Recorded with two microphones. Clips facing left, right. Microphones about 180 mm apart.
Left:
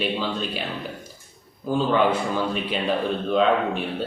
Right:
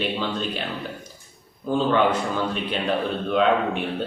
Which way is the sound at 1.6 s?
5° left (ahead or behind).